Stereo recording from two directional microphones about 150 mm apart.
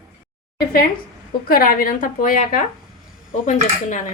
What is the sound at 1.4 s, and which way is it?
A woman's voice, 75° left (ahead or behind).